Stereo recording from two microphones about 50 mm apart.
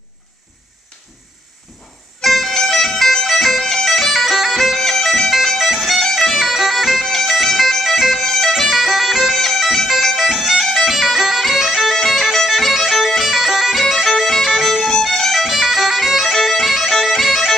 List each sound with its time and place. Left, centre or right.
2.2 s music: centre
3.7 s bagpipes: centre
8.5 s bagpipes: centre
14.6 s music: centre
15.4 s bagpipes: centre